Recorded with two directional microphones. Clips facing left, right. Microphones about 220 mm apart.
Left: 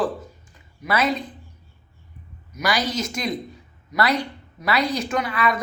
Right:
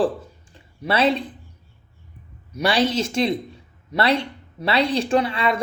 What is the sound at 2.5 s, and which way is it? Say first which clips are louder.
Speech: right 4 dB; 30° right (ahead or behind).